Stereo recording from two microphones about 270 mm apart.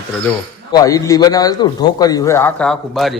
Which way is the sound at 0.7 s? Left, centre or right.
Centre.